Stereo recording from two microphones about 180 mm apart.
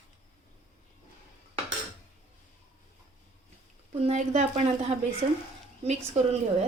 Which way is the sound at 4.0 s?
40° right (ahead or behind).